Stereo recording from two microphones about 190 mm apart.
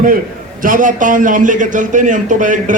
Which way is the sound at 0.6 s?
45° right (ahead or behind).